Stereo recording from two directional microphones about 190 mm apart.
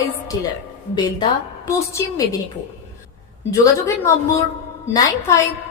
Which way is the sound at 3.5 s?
15° left (ahead or behind).